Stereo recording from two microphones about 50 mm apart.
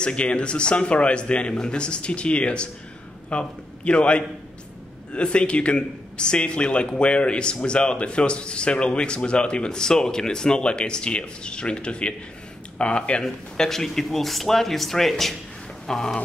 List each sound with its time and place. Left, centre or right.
0.0 s a man's voice: left
13.2 s speech: centre